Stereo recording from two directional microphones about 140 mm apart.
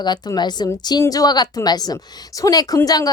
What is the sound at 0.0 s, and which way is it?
A woman's voice, 30° left (ahead or behind).